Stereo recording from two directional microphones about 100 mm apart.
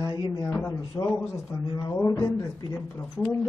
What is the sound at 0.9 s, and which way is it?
Speech, 30° left (ahead or behind).